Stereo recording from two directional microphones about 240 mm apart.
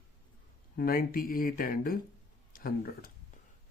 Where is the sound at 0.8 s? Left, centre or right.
Left.